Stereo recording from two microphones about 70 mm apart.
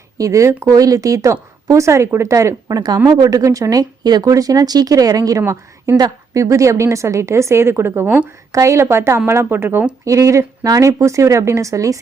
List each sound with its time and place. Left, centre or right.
0.2 s speech: right
2.7 s speech: right
8.5 s a woman's voice: right
10.1 s speech: right